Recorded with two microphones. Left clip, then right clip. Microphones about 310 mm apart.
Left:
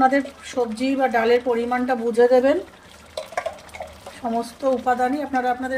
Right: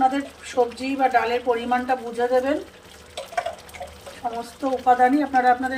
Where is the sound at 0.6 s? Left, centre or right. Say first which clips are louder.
Even; left.